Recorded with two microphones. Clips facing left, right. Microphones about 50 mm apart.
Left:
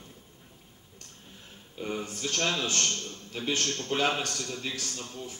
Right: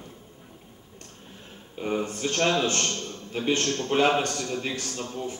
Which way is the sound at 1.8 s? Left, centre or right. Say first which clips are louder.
Right 6 dB; right.